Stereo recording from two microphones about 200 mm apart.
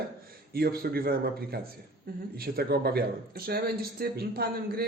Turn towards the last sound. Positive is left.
turn(degrees=-50)  # may be behind; listen again after turning